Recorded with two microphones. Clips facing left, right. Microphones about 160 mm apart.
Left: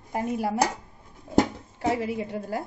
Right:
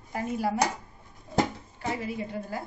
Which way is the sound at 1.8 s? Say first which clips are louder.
Left 6 dB; 75° left (ahead or behind).